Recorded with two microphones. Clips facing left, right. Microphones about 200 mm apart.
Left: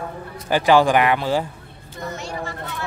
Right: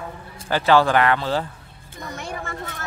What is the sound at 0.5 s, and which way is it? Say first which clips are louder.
Speech: left 2 dB; 15° left (ahead or behind).